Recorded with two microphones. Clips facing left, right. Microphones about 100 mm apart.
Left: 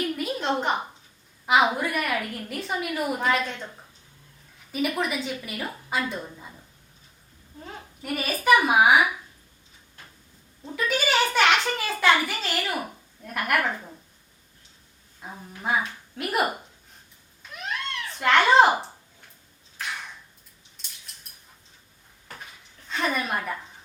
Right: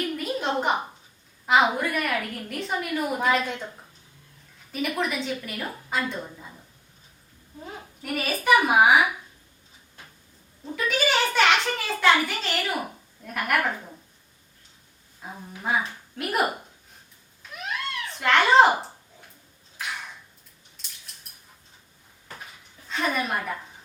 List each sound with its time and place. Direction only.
0.0 s a sound: centre (ahead or behind)
1.5 s a child's voice: 5° left (ahead or behind)
7.6 s a child's voice: centre (ahead or behind)
10.8 s a child's voice: centre (ahead or behind)
15.2 s a child's voice: centre (ahead or behind)
17.4 s cat: centre (ahead or behind)
22.9 s a woman's voice: centre (ahead or behind)